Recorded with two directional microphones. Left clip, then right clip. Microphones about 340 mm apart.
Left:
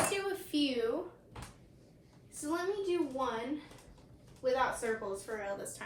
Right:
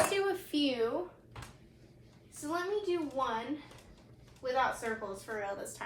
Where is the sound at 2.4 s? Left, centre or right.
Centre.